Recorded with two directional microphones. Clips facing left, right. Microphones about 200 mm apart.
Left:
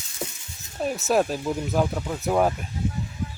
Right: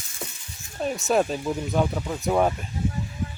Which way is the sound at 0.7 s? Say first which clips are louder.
Even; centre (ahead or behind).